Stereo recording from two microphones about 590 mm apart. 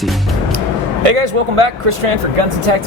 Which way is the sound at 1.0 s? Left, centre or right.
Right.